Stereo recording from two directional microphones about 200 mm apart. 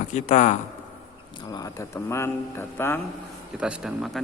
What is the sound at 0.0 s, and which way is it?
Speech, 35° left (ahead or behind).